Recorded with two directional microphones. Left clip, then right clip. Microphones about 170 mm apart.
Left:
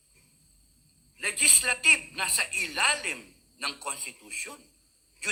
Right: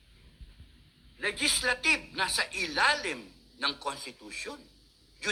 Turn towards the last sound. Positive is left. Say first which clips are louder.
# left 2 dB
turn(degrees=-10)  # may be behind; listen again after turning